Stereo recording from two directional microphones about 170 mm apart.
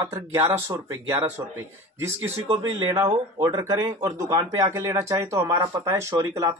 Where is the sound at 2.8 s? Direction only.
15° right (ahead or behind).